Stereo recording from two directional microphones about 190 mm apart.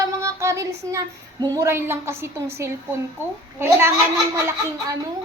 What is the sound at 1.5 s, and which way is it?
A woman's voice, 15° right (ahead or behind).